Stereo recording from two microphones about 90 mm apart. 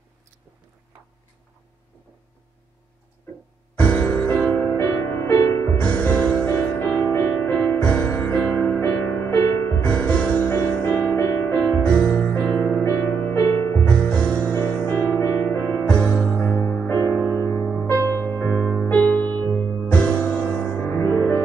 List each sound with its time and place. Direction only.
3.7 s music: 15° left (ahead or behind)
4.7 s music: 30° left (ahead or behind)
11.2 s music: 30° left (ahead or behind)
11.7 s music: 20° left (ahead or behind)
13.9 s music: 15° left (ahead or behind)
15.2 s music: 30° left (ahead or behind)
15.6 s music: 15° left (ahead or behind)
17.8 s music: 35° right (ahead or behind)
18.1 s music: 20° left (ahead or behind)